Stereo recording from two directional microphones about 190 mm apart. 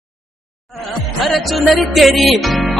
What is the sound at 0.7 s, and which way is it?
Music, centre (ahead or behind).